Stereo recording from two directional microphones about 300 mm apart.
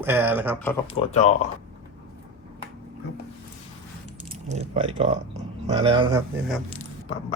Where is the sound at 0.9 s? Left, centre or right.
Left.